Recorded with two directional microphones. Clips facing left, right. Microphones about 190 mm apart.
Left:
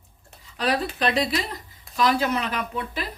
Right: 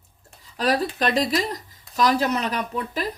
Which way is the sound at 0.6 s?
40° right (ahead or behind).